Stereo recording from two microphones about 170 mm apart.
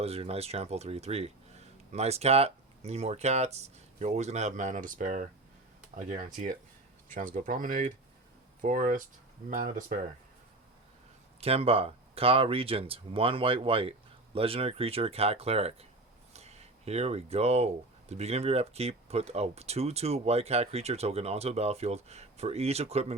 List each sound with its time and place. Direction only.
0.0 s speech: 35° right (ahead or behind); by 10.0 s 50° right (ahead or behind)
11.3 s speech: 35° right (ahead or behind)
16.3 s a sound: 40° right (ahead or behind)
18.1 s speech: 40° right (ahead or behind)